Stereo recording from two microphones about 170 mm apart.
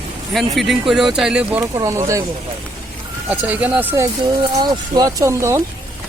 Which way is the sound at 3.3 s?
10° right (ahead or behind).